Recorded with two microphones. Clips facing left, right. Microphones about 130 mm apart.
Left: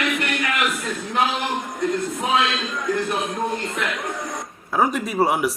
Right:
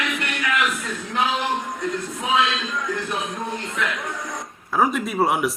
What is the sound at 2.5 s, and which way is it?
Speech, 35° left (ahead or behind).